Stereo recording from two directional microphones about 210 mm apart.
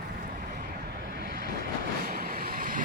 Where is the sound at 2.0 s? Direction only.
45° right (ahead or behind).